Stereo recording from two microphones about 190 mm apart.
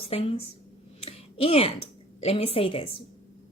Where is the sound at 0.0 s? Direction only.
30° left (ahead or behind).